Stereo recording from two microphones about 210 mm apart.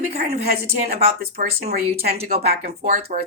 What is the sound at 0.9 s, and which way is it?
Speech, 45° right (ahead or behind).